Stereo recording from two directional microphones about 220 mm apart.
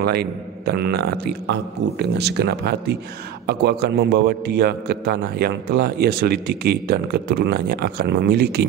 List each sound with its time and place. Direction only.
0.0 s a man's voice: 45° right (ahead or behind)